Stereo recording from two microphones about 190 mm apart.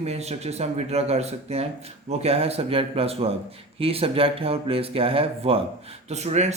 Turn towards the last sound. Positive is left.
turn(degrees=-35)  # may be behind; listen again after turning